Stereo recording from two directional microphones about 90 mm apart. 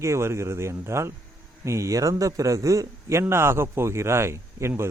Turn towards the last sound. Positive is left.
turn(degrees=-30)  # may be behind; listen again after turning